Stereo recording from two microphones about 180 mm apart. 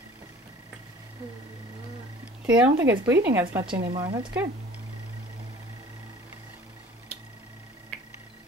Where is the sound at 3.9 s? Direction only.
25° right (ahead or behind).